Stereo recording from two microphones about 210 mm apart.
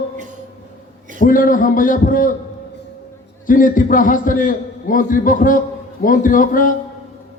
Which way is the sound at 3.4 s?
40° left (ahead or behind).